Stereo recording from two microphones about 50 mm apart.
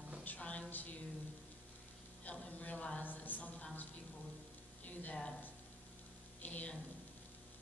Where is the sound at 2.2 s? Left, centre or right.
Left.